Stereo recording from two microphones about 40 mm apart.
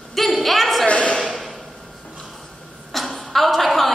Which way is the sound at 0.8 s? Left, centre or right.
Left.